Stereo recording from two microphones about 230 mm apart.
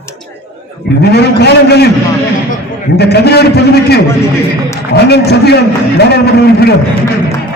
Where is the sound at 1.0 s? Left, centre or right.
Left.